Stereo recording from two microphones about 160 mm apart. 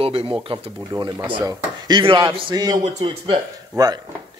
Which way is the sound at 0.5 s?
25° right (ahead or behind).